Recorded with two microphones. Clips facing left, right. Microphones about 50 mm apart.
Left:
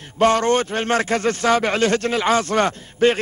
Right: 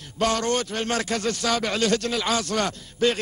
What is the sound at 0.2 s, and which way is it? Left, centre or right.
A man's voice, left.